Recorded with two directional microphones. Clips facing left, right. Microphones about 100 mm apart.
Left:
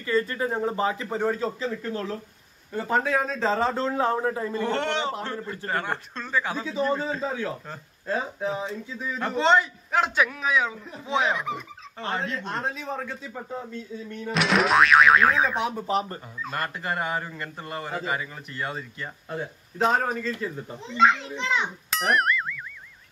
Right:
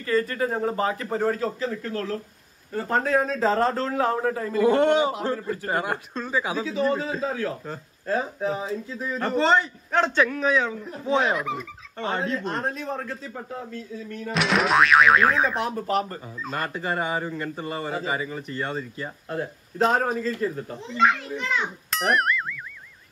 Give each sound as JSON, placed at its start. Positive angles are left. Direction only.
{"t": 0.1, "sound": "a man's voice", "side_deg": -5}
{"t": 3.9, "sound": "a man's voice", "side_deg": 30}
{"t": 4.3, "sound": "a man's voice", "side_deg": 15}
{"t": 4.6, "sound": "a man's voice", "side_deg": -10}